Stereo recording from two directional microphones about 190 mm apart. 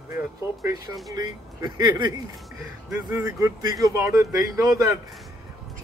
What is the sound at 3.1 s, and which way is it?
Speech, 10° right (ahead or behind).